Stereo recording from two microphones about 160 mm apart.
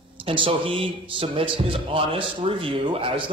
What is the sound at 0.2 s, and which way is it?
A man's voice, 35° right (ahead or behind).